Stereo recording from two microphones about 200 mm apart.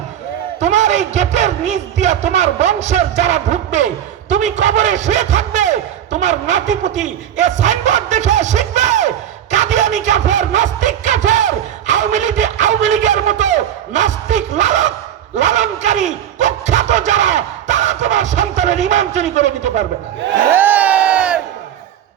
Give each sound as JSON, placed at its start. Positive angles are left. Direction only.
{"t": 0.6, "sound": "a man's voice", "side_deg": -35}
{"t": 20.5, "sound": "crowd", "side_deg": -10}